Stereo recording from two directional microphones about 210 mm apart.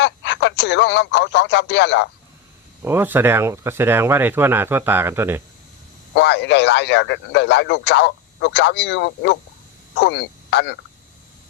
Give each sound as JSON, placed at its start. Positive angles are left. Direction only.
{"t": 0.0, "sound": "speech", "side_deg": 55}
{"t": 2.8, "sound": "speech", "side_deg": -10}
{"t": 6.1, "sound": "a man's voice", "side_deg": 55}